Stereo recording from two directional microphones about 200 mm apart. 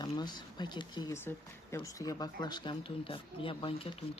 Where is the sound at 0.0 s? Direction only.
20° left (ahead or behind).